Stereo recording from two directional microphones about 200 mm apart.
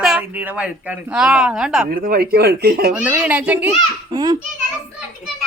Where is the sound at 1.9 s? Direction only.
45° right (ahead or behind).